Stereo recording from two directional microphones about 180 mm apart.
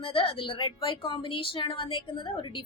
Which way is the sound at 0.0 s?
30° left (ahead or behind).